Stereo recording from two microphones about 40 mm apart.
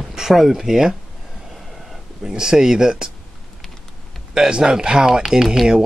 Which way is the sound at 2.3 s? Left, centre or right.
Centre.